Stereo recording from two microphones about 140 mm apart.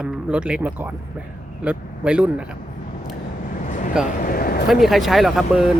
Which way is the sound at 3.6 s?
65° left (ahead or behind).